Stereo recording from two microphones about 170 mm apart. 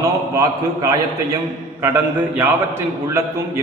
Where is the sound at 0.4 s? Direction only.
20° right (ahead or behind).